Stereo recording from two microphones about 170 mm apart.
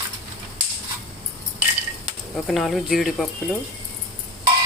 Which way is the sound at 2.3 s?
Centre (ahead or behind).